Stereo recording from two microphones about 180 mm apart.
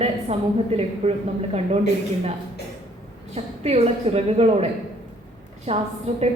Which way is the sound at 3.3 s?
35° right (ahead or behind).